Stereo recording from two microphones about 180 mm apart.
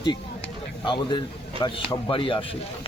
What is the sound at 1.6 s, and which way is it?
Speech, 25° left (ahead or behind).